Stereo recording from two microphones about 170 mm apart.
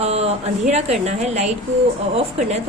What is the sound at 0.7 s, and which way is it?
A woman's voice, 40° right (ahead or behind).